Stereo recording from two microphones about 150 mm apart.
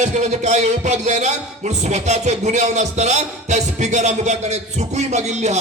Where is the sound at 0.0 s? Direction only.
50° right (ahead or behind).